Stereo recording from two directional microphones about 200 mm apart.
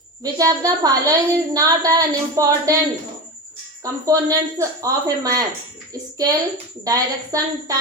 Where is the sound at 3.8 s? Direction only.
15° right (ahead or behind).